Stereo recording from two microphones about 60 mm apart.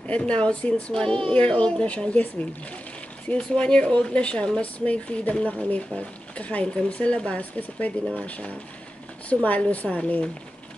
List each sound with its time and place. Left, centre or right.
0.1 s speech: centre
3.3 s speech: centre